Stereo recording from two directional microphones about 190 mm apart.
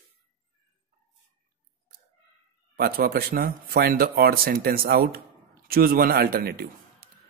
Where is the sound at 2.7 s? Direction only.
50° right (ahead or behind).